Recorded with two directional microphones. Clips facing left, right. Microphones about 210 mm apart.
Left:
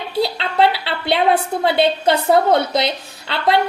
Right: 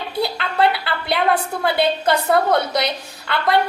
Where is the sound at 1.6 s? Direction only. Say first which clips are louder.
Left 2 dB; 25° left (ahead or behind).